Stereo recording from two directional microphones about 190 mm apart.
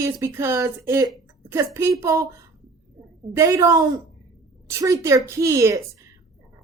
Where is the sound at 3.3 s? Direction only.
15° right (ahead or behind).